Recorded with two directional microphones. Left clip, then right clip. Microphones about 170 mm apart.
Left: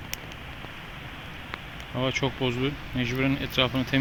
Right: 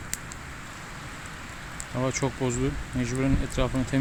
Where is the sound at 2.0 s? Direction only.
25° right (ahead or behind).